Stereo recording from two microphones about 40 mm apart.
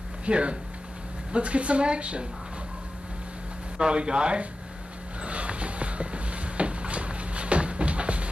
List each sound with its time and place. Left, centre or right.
0.2 s a woman's voice: right
3.7 s a woman's voice: right
5.2 s a sound: right